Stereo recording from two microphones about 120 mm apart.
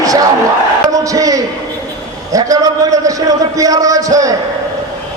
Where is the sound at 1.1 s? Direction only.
30° right (ahead or behind).